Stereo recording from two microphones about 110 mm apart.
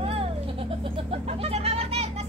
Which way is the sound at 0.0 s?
60° right (ahead or behind).